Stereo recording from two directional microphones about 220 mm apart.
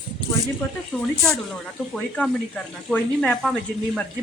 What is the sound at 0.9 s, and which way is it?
A man's voice, 5° left (ahead or behind).